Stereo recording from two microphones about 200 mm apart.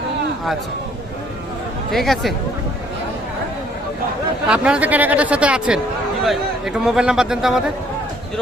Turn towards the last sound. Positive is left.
turn(degrees=0)  # may be behind; listen again after turning